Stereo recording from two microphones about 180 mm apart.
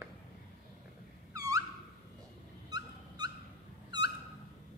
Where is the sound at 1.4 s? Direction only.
20° right (ahead or behind).